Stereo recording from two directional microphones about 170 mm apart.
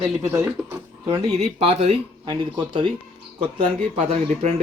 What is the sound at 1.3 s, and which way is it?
Speech, 40° right (ahead or behind).